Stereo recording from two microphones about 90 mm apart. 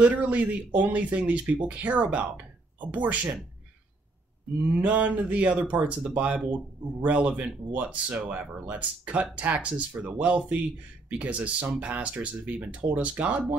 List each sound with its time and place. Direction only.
0.0 s speech: 15° right (ahead or behind)
4.7 s speech: 15° right (ahead or behind)